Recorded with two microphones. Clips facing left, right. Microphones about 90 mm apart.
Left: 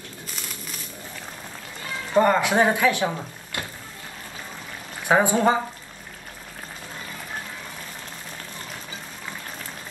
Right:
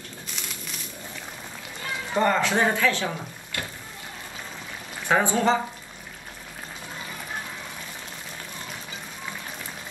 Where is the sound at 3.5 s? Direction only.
20° left (ahead or behind).